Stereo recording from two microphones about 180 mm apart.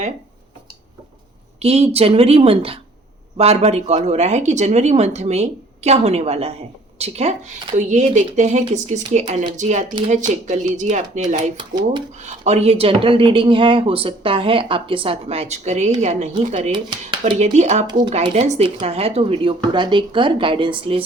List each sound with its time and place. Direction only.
1.6 s speech: 35° right (ahead or behind)
11.5 s speech: 25° right (ahead or behind)
12.2 s speech: 40° right (ahead or behind)
16.7 s speech: 25° right (ahead or behind)
17.4 s speech: 40° right (ahead or behind)
17.8 s speech: 25° right (ahead or behind)
18.2 s speech: 35° right (ahead or behind)